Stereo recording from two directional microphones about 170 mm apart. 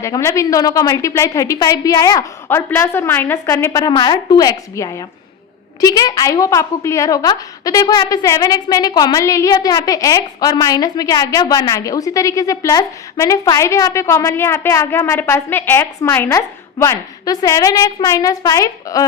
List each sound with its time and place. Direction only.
0.0 s a woman's voice: 15° left (ahead or behind)